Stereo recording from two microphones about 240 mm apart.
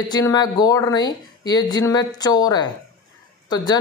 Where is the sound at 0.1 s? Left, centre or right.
Centre.